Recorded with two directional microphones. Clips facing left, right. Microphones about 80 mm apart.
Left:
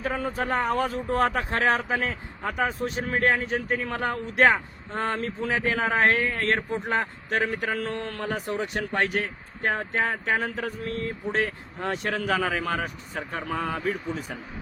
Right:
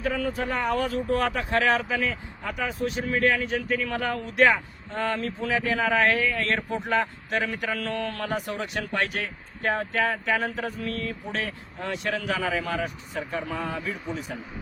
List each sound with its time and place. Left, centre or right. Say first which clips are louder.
0.0 s a man's voice: right 1 dB; left